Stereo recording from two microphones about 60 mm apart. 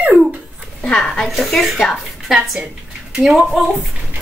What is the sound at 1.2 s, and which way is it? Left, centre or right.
Speech, centre.